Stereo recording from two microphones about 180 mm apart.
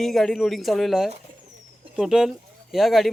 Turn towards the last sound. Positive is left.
turn(degrees=0)  # may be behind; listen again after turning